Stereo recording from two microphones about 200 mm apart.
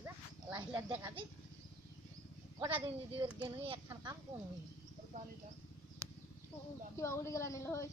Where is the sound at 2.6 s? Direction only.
25° right (ahead or behind).